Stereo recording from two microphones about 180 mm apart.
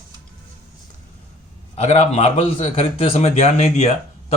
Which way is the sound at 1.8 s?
40° left (ahead or behind).